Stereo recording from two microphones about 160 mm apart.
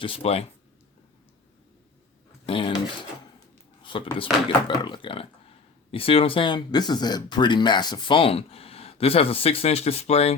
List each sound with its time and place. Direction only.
0.0 s speech: 35° left (ahead or behind)
2.5 s speech: 35° left (ahead or behind)
3.8 s speech: 35° left (ahead or behind)